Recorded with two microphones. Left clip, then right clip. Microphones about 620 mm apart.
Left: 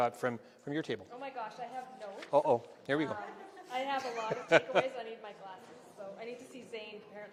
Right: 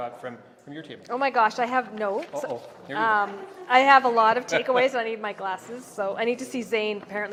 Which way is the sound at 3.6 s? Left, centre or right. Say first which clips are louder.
Right 19 dB; right.